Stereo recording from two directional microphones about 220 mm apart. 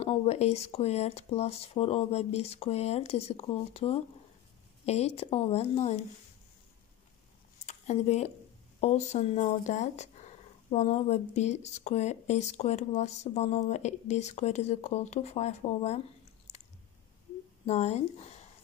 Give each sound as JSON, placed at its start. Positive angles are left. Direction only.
{"t": 0.0, "sound": "speech", "side_deg": 25}
{"t": 7.6, "sound": "speech", "side_deg": 30}
{"t": 16.5, "sound": "chewing", "side_deg": 30}
{"t": 17.6, "sound": "speech", "side_deg": 30}